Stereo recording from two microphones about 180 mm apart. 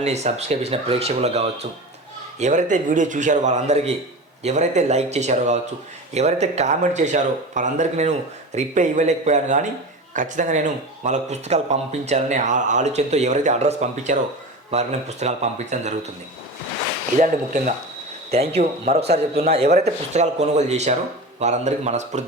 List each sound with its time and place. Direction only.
0.0 s a man's voice: 40° right (ahead or behind)
17.2 s a man's voice: 40° right (ahead or behind)